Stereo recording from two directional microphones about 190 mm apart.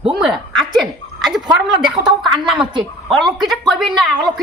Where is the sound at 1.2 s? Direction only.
Centre (ahead or behind).